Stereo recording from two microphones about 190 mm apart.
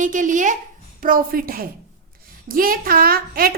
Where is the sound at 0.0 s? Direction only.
45° right (ahead or behind).